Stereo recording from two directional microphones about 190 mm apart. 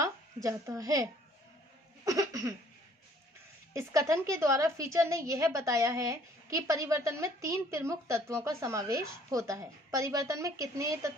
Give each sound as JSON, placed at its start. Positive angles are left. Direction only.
{"t": 0.0, "sound": "a woman's voice", "side_deg": -15}
{"t": 2.0, "sound": "a sound", "side_deg": -20}
{"t": 3.8, "sound": "a woman's voice", "side_deg": -15}